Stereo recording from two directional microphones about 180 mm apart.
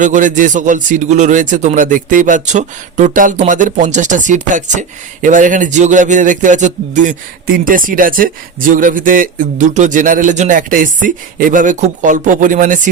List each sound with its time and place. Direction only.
0.0 s a man's voice: 45° right (ahead or behind)